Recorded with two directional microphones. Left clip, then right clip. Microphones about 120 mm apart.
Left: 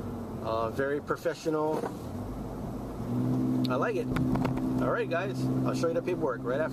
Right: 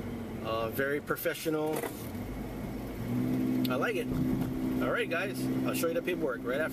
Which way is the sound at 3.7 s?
30° right (ahead or behind).